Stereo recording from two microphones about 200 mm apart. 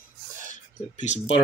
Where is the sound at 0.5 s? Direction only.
35° left (ahead or behind).